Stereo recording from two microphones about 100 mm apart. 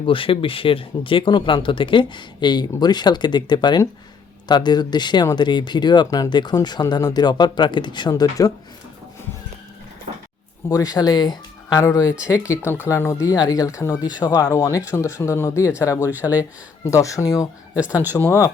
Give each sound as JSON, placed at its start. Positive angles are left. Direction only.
{"t": 0.0, "sound": "speech", "side_deg": 65}
{"t": 8.1, "sound": "speech", "side_deg": 35}
{"t": 10.7, "sound": "speech", "side_deg": 40}
{"t": 11.8, "sound": "speech", "side_deg": 35}